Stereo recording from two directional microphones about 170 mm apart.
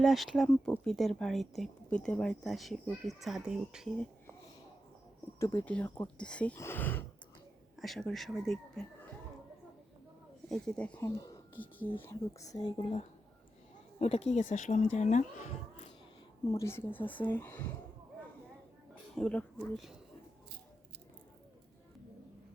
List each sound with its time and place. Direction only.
0.0 s speech: centre (ahead or behind)
5.4 s speech: 15° left (ahead or behind)
10.5 s speech: 5° left (ahead or behind)
11.0 s speech: 25° left (ahead or behind)
11.5 s speech: 10° left (ahead or behind); by 15.9 s 45° left (ahead or behind)
16.5 s speech: 15° left (ahead or behind)
19.1 s speech: 5° left (ahead or behind)